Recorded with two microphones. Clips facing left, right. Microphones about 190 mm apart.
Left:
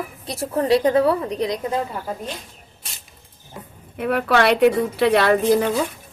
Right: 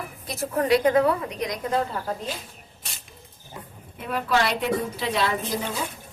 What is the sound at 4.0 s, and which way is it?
A woman's voice, 65° left (ahead or behind).